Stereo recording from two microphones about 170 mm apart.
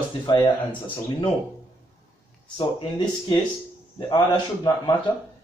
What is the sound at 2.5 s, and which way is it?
A man's voice, 25° left (ahead or behind).